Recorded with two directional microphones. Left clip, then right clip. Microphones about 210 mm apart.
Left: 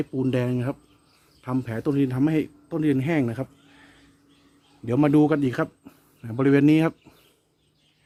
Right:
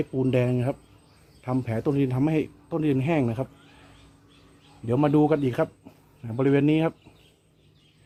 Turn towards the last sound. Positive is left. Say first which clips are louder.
# left 3 dB
turn(degrees=50)  # may be behind; listen again after turning